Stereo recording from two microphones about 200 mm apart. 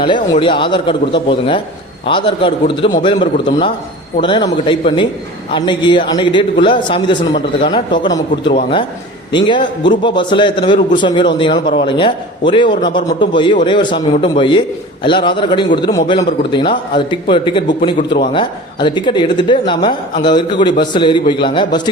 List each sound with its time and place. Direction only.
0.0 s speech: 25° left (ahead or behind)